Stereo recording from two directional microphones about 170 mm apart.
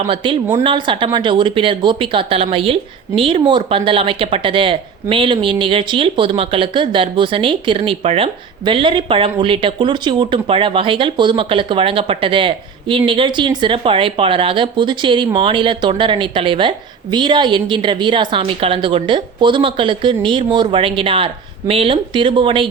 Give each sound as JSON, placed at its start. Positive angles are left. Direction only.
{"t": 0.1, "sound": "speech", "side_deg": -30}